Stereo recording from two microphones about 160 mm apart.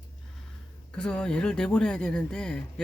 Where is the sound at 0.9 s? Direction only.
5° left (ahead or behind).